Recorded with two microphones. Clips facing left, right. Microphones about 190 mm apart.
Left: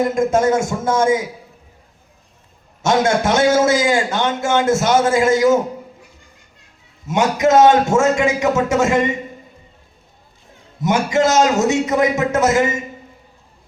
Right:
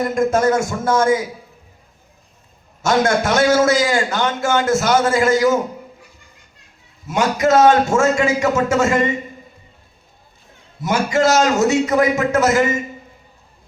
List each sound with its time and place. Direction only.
0.0 s a man's voice: 25° left (ahead or behind)
2.8 s a man's voice: 25° left (ahead or behind)
7.1 s a man's voice: 20° left (ahead or behind)
10.8 s a man's voice: 20° left (ahead or behind)